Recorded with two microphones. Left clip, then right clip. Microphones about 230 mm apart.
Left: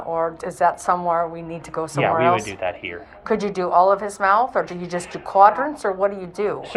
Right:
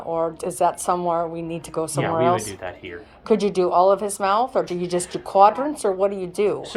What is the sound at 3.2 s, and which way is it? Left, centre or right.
A woman's voice, right.